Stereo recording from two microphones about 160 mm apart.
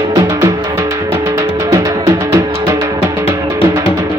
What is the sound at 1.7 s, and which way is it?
Music, 20° right (ahead or behind).